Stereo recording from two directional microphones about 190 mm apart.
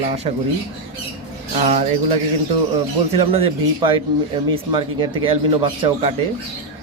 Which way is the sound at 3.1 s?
30° right (ahead or behind).